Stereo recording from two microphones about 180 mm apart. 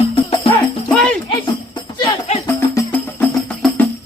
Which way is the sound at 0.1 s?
30° left (ahead or behind).